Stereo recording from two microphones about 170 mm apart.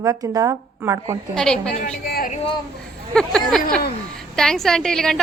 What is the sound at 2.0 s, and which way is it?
Speech, 60° left (ahead or behind).